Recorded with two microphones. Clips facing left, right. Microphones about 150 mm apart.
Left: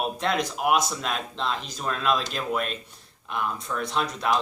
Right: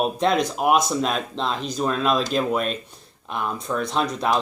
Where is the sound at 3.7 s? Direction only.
25° right (ahead or behind).